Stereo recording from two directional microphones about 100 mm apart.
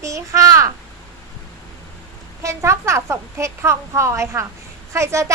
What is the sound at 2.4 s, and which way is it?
A woman's voice, 30° right (ahead or behind).